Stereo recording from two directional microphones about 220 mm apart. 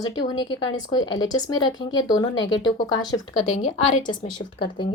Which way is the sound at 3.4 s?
30° left (ahead or behind).